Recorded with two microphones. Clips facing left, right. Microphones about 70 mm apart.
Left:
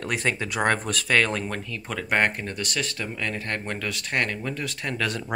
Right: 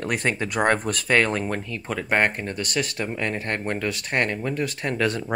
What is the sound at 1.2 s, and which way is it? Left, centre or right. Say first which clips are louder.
Speech: right 2 dB; centre.